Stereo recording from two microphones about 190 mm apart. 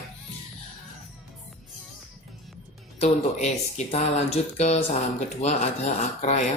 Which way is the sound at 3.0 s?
35° left (ahead or behind).